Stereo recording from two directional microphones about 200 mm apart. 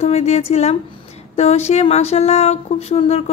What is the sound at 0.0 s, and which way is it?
Speech, 30° left (ahead or behind).